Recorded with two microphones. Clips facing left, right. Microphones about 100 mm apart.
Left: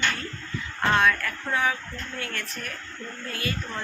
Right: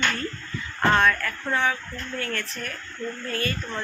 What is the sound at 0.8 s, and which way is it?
Speech, centre (ahead or behind).